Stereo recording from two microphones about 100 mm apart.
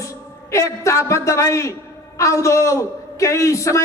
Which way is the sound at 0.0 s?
30° left (ahead or behind).